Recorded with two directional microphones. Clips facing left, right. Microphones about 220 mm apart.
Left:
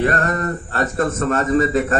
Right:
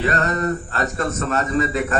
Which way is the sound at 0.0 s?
50° left (ahead or behind).